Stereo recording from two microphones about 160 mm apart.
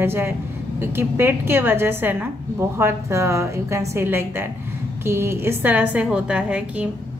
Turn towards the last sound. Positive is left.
turn(degrees=-10)  # may be behind; listen again after turning